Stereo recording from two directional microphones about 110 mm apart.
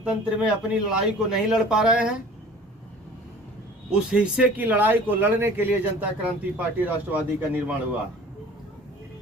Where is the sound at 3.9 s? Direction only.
10° right (ahead or behind).